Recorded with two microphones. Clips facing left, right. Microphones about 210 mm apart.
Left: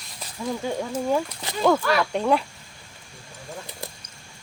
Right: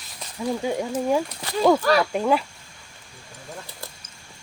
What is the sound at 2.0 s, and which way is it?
Speech, 5° right (ahead or behind).